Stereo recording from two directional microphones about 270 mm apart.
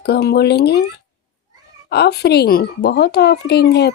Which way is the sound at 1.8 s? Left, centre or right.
Left.